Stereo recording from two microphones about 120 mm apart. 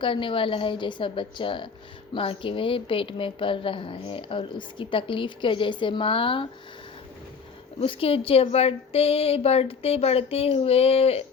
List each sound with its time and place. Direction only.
0.0 s a woman's voice: 45° left (ahead or behind)
7.8 s speech: 50° left (ahead or behind)